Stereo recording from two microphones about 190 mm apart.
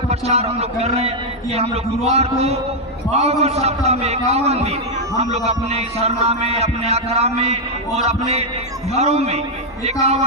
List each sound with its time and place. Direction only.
0.1 s a man's voice: 35° right (ahead or behind)